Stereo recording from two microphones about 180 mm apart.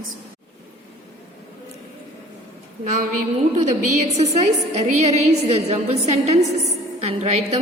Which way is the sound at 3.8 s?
40° right (ahead or behind).